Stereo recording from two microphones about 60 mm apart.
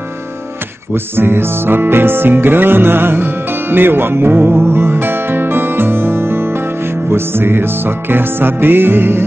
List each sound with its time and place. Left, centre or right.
0.9 s music: right